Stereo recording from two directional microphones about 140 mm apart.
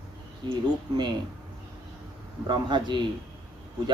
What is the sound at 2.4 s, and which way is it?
Speech, 35° right (ahead or behind).